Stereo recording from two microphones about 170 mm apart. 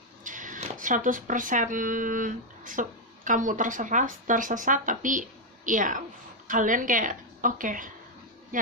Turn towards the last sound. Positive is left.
turn(degrees=-50)  # may be behind; listen again after turning